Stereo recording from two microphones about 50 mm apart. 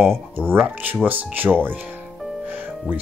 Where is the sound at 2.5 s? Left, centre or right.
Right.